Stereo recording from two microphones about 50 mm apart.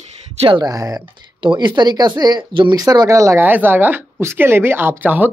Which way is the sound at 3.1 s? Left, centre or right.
Right.